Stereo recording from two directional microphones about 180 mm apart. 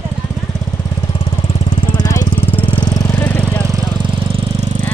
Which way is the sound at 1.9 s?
20° left (ahead or behind).